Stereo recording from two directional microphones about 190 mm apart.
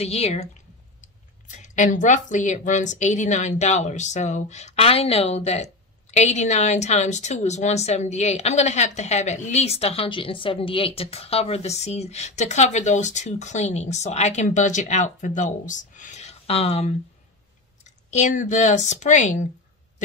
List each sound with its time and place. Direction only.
0.0 s a woman's voice: 35° left (ahead or behind)